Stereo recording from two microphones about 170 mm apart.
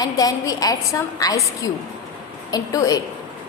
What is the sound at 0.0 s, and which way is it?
A woman's voice, 20° left (ahead or behind).